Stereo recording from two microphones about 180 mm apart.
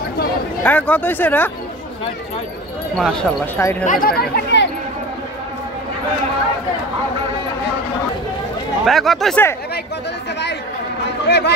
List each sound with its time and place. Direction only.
0.7 s speech: 10° left (ahead or behind)
3.0 s speech: 5° left (ahead or behind)
3.8 s speech: 50° left (ahead or behind); by 4.6 s 65° left (ahead or behind)
8.8 s speech: centre (ahead or behind)
11.2 s speech: 65° left (ahead or behind)